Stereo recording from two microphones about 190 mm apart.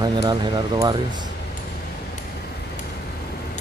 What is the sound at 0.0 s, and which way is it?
Speech, 20° right (ahead or behind).